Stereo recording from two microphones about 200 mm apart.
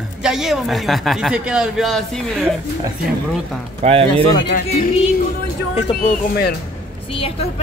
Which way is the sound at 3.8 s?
30° right (ahead or behind).